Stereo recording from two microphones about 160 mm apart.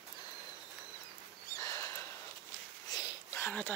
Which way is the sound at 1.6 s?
20° left (ahead or behind).